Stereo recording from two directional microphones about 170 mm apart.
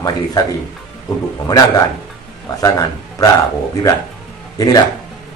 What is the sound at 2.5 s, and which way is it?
Speech, 20° left (ahead or behind).